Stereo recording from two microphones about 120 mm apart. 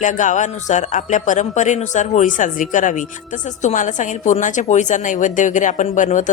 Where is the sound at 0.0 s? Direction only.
90° left.